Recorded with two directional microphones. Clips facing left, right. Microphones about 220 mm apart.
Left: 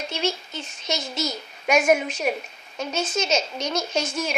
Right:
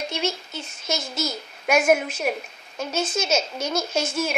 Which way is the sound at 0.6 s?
Centre (ahead or behind).